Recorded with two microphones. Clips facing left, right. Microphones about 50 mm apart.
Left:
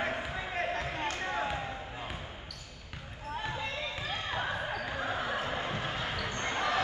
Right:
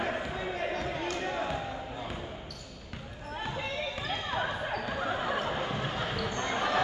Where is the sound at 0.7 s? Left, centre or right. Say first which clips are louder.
Right 1 dB; left.